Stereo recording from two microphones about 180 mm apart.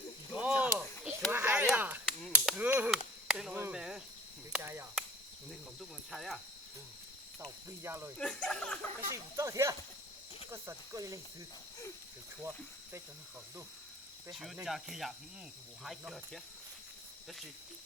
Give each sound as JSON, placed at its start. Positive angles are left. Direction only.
{"t": 0.3, "sound": "chop", "side_deg": -5}
{"t": 1.3, "sound": "a sound", "side_deg": -10}
{"t": 3.2, "sound": "cricket", "side_deg": -5}
{"t": 6.1, "sound": "cricket", "side_deg": 0}
{"t": 7.4, "sound": "cricket", "side_deg": -15}
{"t": 8.2, "sound": "speech", "side_deg": 5}
{"t": 9.0, "sound": "speech", "side_deg": -15}
{"t": 14.3, "sound": "speech", "side_deg": -5}